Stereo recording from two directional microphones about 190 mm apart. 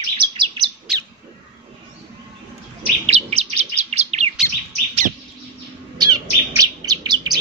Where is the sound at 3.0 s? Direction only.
35° right (ahead or behind).